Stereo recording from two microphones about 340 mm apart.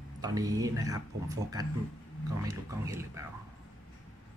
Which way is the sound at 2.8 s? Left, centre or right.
Centre.